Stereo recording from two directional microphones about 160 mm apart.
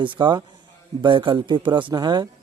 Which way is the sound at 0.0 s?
30° right (ahead or behind).